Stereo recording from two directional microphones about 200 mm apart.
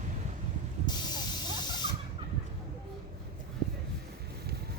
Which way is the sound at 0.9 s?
20° left (ahead or behind).